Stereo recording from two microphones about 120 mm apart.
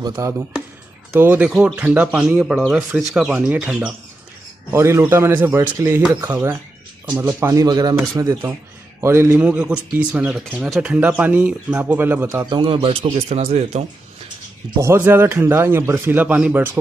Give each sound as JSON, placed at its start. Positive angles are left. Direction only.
{"t": 0.0, "sound": "a man's voice", "side_deg": -25}
{"t": 4.6, "sound": "a man's voice", "side_deg": -20}
{"t": 7.3, "sound": "a man's voice", "side_deg": -25}
{"t": 9.4, "sound": "speech", "side_deg": -10}
{"t": 12.4, "sound": "a man's voice", "side_deg": -45}
{"t": 14.8, "sound": "a man's voice", "side_deg": -20}